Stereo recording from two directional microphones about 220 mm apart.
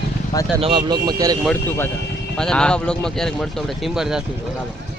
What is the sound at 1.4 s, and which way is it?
Speech, 10° left (ahead or behind).